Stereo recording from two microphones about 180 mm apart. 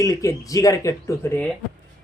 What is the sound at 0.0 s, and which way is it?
Speech, 20° left (ahead or behind).